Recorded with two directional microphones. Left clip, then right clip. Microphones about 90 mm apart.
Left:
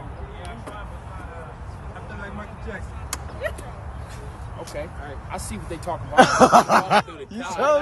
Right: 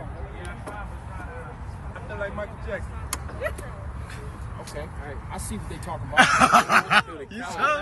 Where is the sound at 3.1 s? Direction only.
5° left (ahead or behind).